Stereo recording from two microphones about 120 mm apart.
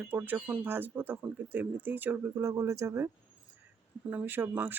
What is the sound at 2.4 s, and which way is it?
Speech, 25° right (ahead or behind).